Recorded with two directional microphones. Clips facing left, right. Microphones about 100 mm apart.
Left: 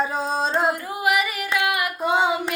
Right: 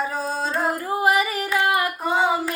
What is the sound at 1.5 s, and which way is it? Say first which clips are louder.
Child singing: right 3 dB; 35° right (ahead or behind).